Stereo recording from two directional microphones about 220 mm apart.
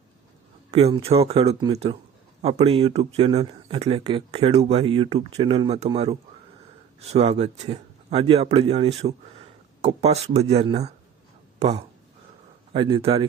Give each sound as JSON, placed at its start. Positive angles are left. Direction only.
{"t": 0.9, "sound": "speech", "side_deg": -25}